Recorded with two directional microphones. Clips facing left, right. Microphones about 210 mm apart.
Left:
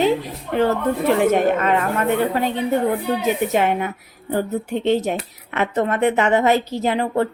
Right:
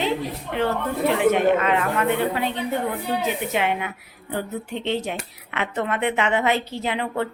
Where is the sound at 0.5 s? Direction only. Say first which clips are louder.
Left 6 dB; 40° left (ahead or behind).